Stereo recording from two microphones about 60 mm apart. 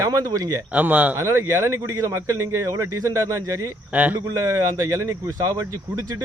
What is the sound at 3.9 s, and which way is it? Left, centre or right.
Speech, right.